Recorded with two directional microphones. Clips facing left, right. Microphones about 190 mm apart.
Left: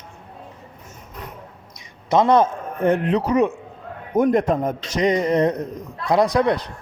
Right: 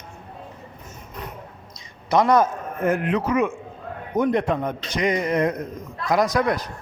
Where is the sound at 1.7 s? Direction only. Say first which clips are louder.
Left 2 dB; 20° left (ahead or behind).